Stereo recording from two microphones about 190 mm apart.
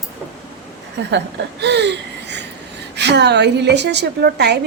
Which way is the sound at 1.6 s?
65° right (ahead or behind).